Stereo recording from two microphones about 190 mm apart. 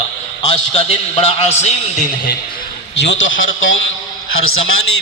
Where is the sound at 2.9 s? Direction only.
70° left (ahead or behind); by 4.5 s 90° left.